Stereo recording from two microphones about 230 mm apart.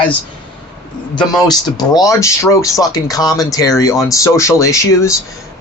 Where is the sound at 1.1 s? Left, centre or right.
Centre.